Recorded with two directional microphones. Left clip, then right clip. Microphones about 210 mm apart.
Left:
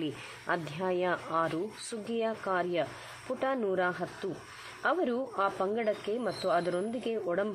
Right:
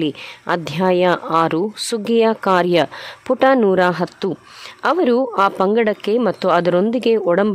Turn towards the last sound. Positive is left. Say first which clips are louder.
# right 17 dB
turn(degrees=-55)  # may be behind; listen again after turning